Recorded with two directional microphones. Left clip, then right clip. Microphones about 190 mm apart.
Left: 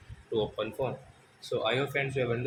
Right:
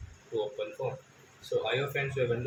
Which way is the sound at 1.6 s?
35° left (ahead or behind).